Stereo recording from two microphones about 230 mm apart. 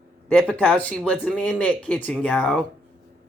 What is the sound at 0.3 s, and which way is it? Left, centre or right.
Speech, centre.